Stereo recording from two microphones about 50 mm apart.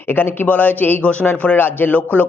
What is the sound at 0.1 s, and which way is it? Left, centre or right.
Speech, left.